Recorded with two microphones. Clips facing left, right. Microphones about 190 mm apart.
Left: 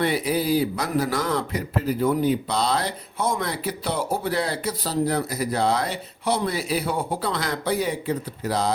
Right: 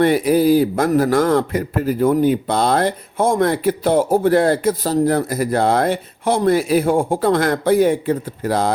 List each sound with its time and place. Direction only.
0.0 s speech: 45° right (ahead or behind)